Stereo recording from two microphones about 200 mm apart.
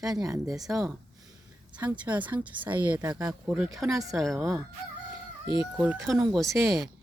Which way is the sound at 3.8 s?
15° right (ahead or behind).